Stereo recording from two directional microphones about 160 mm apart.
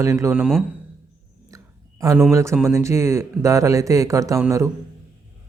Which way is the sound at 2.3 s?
20° right (ahead or behind).